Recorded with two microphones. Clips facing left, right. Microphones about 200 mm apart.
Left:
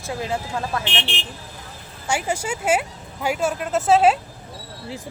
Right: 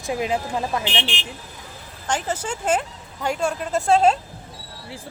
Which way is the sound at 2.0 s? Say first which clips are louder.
Left 1 dB; 10° left (ahead or behind).